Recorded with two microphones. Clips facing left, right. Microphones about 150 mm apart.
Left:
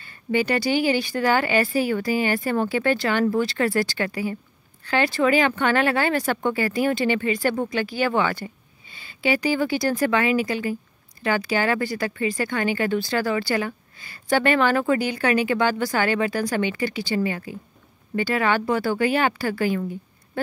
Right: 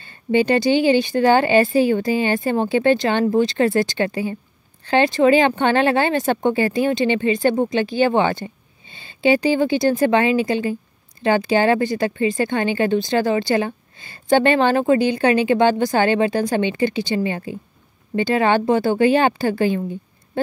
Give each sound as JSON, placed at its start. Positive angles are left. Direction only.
{"t": 0.0, "sound": "speech", "side_deg": -25}